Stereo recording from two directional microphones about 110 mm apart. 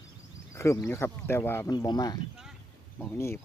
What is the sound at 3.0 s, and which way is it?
Speech, 20° left (ahead or behind).